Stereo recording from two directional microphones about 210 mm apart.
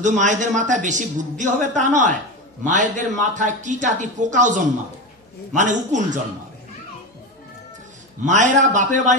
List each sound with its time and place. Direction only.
0.0 s speech: 35° right (ahead or behind)
8.3 s speech: 35° right (ahead or behind)